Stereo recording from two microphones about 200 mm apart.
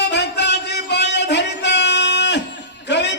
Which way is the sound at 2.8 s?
60° left (ahead or behind).